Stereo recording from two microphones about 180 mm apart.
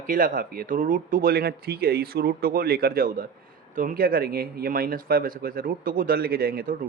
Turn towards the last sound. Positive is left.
turn(degrees=-55)  # may be behind; listen again after turning